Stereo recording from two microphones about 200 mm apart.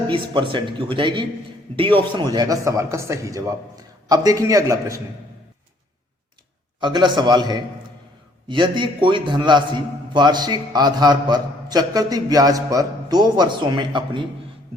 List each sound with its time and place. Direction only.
0.1 s a man's voice: 25° right (ahead or behind)
6.7 s a man's voice: 20° right (ahead or behind)